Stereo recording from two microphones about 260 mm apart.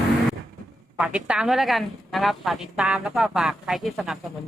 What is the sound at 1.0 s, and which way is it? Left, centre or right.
A woman's voice, centre.